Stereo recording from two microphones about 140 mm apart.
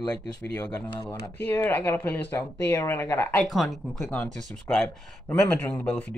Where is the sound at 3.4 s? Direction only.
Centre (ahead or behind).